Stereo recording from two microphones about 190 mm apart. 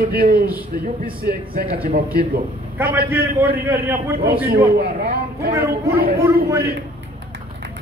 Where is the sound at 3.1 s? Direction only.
10° right (ahead or behind).